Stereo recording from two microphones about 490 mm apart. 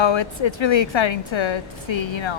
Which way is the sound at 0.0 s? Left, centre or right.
Left.